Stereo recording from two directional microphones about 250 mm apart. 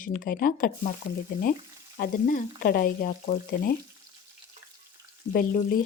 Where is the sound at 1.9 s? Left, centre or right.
Left.